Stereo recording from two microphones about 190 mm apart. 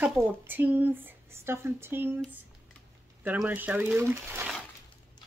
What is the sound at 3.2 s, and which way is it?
Speech, 10° right (ahead or behind).